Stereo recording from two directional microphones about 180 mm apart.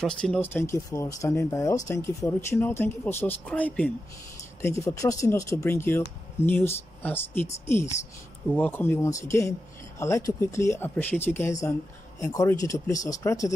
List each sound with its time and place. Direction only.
0.0 s speech: 5° left (ahead or behind)